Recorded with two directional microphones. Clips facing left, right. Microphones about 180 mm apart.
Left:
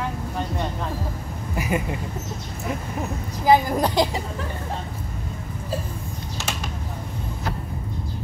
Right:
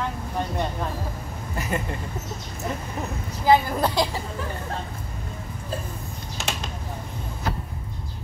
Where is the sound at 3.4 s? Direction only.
15° left (ahead or behind).